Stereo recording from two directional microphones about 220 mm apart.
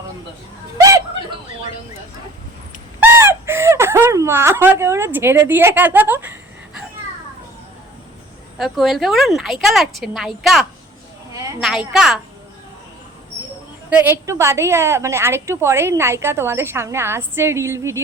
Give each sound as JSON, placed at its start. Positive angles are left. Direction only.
{"t": 0.8, "sound": "chuckle", "side_deg": -15}
{"t": 3.0, "sound": "a sound", "side_deg": -10}
{"t": 8.5, "sound": "a woman's voice", "side_deg": 0}
{"t": 11.9, "sound": "a woman's voice", "side_deg": 0}
{"t": 14.0, "sound": "a woman's voice", "side_deg": -10}